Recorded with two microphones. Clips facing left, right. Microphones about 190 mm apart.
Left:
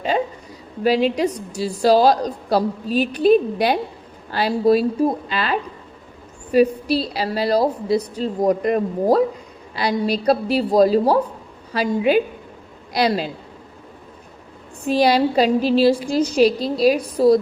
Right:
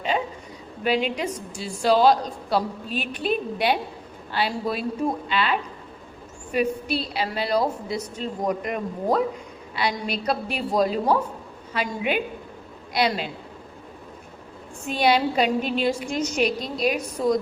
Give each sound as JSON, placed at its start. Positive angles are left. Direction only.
{"t": 0.9, "sound": "a woman's voice", "side_deg": 35}
{"t": 14.8, "sound": "a woman's voice", "side_deg": 35}